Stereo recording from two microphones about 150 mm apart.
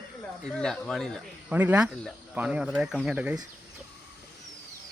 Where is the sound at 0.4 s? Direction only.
5° left (ahead or behind).